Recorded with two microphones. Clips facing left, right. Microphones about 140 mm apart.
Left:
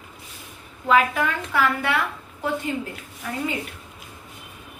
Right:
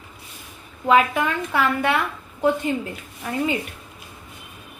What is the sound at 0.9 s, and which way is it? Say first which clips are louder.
Speech: right 2 dB; 25° right (ahead or behind).